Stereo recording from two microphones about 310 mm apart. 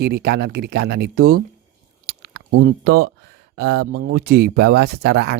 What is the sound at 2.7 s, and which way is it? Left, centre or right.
Speech, right.